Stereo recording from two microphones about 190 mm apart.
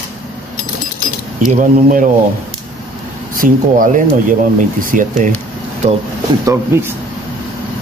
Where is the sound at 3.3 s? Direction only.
45° right (ahead or behind).